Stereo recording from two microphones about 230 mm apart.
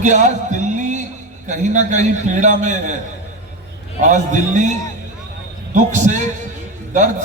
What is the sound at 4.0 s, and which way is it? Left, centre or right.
A man's voice, right.